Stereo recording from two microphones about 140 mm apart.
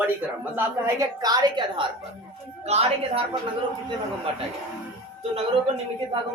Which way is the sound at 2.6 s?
50° right (ahead or behind).